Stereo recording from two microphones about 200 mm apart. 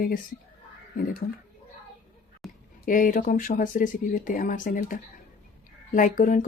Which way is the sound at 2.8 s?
40° left (ahead or behind).